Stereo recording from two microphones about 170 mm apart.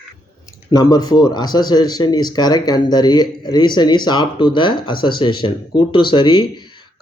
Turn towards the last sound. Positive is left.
turn(degrees=25)  # may be behind; listen again after turning